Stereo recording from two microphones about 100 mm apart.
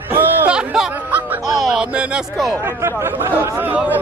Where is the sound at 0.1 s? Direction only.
20° right (ahead or behind).